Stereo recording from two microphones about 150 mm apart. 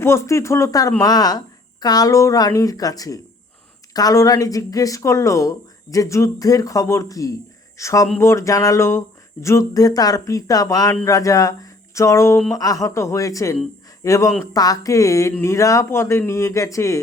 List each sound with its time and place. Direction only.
0.0 s speech: 20° left (ahead or behind)